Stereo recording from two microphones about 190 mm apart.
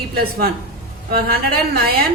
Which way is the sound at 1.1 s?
50° right (ahead or behind).